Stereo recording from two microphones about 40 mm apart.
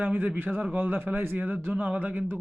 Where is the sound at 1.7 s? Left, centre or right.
Right.